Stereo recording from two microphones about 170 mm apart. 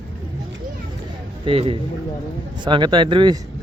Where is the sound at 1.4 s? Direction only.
35° right (ahead or behind).